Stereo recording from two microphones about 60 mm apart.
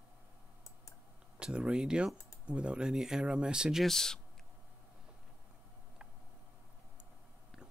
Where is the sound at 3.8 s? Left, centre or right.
Centre.